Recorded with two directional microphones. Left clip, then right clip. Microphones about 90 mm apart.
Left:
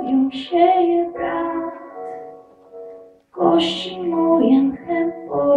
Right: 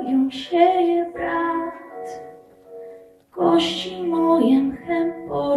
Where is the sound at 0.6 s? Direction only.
5° left (ahead or behind).